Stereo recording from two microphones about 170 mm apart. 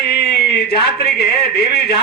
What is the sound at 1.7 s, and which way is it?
Speech, 70° left (ahead or behind).